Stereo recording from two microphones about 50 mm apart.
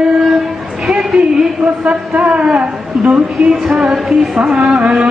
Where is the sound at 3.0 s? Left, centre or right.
Centre.